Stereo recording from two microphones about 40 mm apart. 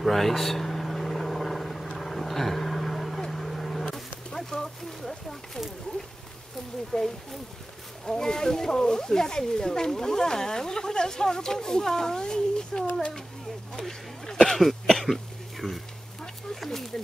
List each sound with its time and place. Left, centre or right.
0.0 s vehicle: centre
3.8 s speech: centre
6.9 s speech: centre
13.7 s a sound: centre
14.7 s cough: centre
15.6 s a sound: centre